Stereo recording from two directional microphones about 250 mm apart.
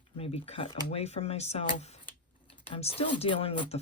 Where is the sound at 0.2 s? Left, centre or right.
Left.